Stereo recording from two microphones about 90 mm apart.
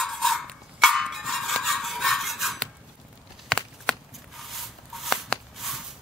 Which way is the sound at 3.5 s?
Centre (ahead or behind).